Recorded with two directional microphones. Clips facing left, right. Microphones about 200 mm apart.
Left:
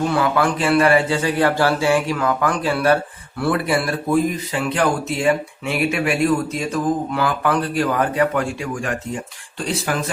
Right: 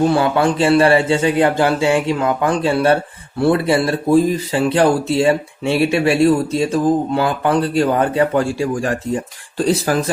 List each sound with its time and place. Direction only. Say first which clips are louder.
0.0 s a man's voice: right 4 dB; 30° right (ahead or behind)